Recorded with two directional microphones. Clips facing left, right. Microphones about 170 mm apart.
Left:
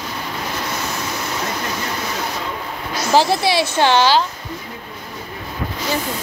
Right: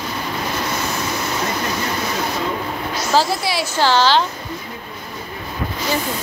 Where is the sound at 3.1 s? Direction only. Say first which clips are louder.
Left 3 dB; 25° left (ahead or behind).